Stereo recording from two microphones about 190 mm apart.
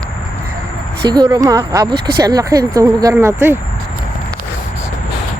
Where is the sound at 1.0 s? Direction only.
20° right (ahead or behind).